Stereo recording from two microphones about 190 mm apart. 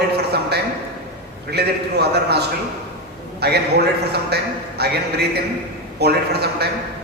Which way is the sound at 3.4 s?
60° right (ahead or behind).